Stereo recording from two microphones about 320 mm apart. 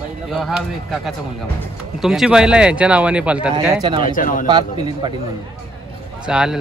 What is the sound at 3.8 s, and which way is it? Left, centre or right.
Speech, centre.